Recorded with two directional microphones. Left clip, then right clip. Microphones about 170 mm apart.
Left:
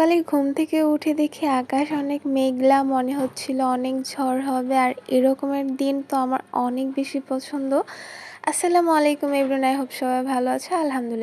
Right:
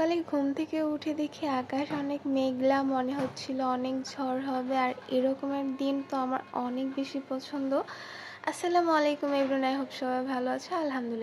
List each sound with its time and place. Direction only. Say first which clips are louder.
0.0 s a woman's voice: left 9 dB; 35° left (ahead or behind)